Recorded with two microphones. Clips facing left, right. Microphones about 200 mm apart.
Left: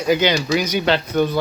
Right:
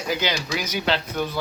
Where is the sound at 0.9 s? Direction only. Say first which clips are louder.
Left 7 dB; 60° left (ahead or behind).